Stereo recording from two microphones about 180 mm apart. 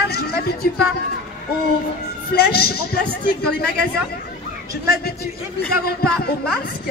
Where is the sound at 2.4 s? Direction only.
60° left (ahead or behind).